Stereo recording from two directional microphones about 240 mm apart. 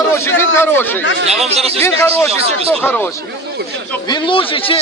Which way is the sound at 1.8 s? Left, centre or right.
Centre.